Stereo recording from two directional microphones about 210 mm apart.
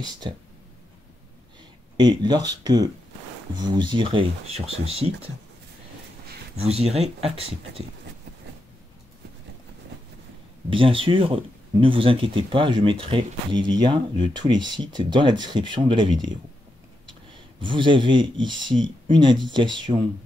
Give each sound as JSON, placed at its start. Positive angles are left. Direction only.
{"t": 0.0, "sound": "speech", "side_deg": -20}
{"t": 2.0, "sound": "speech", "side_deg": -20}
{"t": 6.6, "sound": "speech", "side_deg": -30}
{"t": 10.7, "sound": "speech", "side_deg": -25}
{"t": 17.6, "sound": "speech", "side_deg": -25}